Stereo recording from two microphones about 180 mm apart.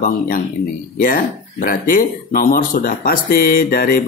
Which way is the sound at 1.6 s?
50° left (ahead or behind).